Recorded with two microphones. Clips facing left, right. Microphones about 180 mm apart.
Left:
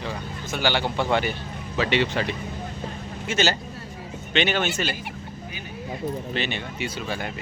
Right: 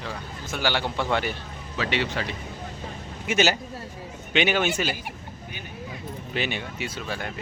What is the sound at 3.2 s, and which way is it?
Speech, 10° right (ahead or behind).